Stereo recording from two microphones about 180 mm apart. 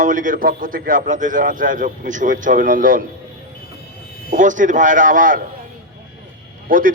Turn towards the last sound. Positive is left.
turn(degrees=-50)  # may be behind; listen again after turning